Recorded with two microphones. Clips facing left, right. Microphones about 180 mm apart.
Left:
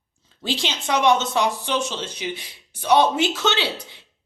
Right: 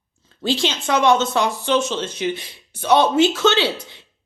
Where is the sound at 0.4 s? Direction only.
15° left (ahead or behind).